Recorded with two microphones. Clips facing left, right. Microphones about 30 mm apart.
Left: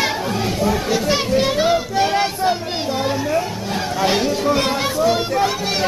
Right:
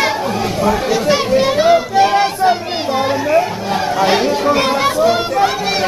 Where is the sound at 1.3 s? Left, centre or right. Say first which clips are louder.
Right 6 dB; centre.